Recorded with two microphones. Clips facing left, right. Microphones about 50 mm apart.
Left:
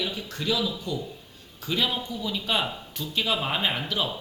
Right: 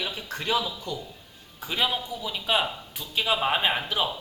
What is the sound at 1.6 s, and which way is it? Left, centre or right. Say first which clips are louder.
Speech: even; centre.